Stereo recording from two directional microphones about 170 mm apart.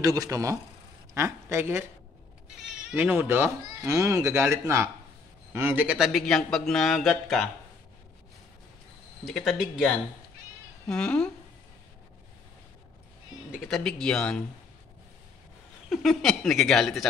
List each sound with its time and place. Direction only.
0.0 s speech: 20° right (ahead or behind)
2.5 s a man's voice: 5° right (ahead or behind)
9.2 s a man's voice: centre (ahead or behind)
10.9 s a man's voice: 5° left (ahead or behind)
13.5 s a man's voice: centre (ahead or behind)
15.9 s a man's voice: centre (ahead or behind)